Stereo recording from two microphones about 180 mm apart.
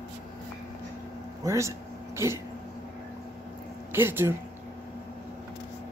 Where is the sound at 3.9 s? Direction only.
15° right (ahead or behind).